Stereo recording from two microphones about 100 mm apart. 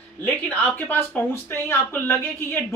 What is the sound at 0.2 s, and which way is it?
Speech, 20° left (ahead or behind).